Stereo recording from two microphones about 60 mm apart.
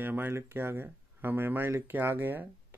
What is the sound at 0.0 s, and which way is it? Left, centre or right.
Speech, right.